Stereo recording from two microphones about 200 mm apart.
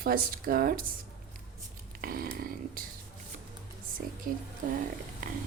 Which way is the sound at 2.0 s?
50° right (ahead or behind).